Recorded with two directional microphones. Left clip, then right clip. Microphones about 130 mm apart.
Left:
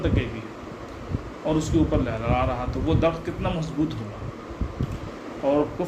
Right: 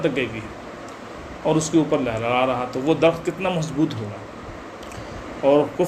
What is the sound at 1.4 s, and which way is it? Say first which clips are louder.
Speech: right 4 dB; 55° right (ahead or behind).